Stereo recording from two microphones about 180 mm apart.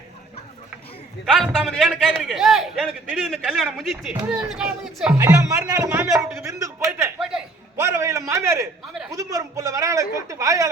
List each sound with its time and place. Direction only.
1.2 s a man's voice: centre (ahead or behind)
5.1 s a man's voice: 15° right (ahead or behind)
7.2 s a sound: 5° right (ahead or behind)
7.8 s a man's voice: 15° right (ahead or behind)